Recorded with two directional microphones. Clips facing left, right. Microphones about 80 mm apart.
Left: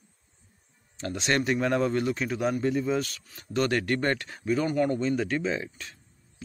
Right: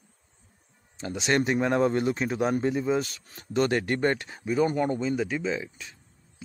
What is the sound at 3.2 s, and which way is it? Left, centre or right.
Speech, right.